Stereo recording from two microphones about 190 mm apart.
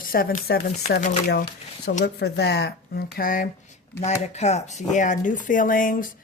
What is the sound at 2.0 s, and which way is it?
Speech, 65° left (ahead or behind).